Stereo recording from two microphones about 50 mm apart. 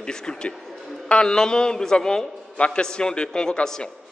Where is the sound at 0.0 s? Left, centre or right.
Centre.